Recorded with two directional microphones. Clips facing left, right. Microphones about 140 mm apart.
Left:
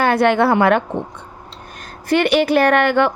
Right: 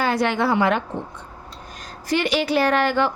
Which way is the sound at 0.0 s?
60° left (ahead or behind).